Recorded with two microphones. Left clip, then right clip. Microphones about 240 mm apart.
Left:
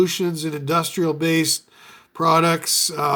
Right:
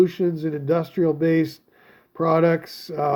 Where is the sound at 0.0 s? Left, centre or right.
Centre.